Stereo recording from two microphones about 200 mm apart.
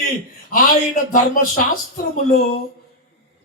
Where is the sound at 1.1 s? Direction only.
40° left (ahead or behind).